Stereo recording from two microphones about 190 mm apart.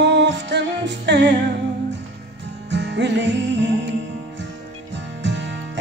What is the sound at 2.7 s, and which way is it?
Music, 65° right (ahead or behind).